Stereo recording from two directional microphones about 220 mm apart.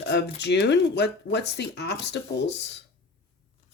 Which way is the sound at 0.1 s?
50° left (ahead or behind).